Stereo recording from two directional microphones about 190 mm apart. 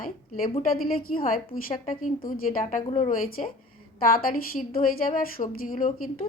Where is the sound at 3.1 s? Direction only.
50° left (ahead or behind).